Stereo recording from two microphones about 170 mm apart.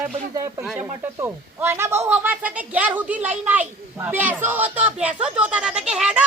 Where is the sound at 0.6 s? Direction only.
5° right (ahead or behind).